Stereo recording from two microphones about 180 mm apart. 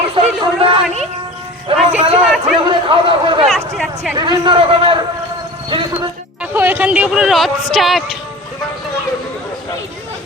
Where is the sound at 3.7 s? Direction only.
Centre (ahead or behind).